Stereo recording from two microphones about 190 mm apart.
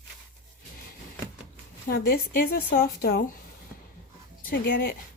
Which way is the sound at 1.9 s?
50° left (ahead or behind).